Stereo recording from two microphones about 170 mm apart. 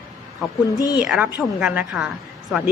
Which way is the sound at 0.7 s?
20° left (ahead or behind).